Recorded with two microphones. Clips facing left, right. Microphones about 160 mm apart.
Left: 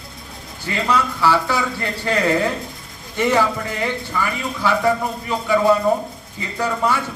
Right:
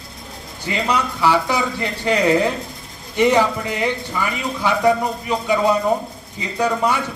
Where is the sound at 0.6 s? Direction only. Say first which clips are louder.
Left 1 dB; 15° right (ahead or behind).